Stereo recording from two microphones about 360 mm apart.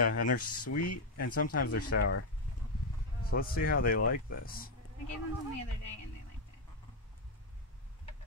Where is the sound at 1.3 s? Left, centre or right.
Left.